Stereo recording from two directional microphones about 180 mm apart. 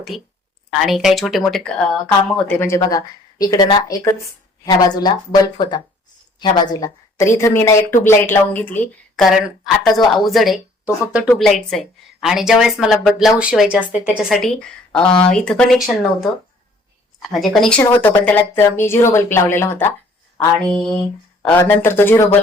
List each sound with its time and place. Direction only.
0.1 s a woman's voice: centre (ahead or behind)